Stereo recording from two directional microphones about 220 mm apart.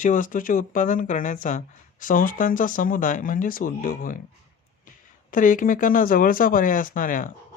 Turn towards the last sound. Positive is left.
turn(degrees=35)  # may be behind; listen again after turning